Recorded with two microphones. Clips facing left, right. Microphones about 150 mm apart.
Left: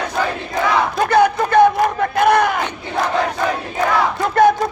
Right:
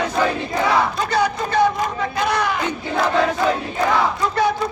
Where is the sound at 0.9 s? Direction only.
55° left (ahead or behind).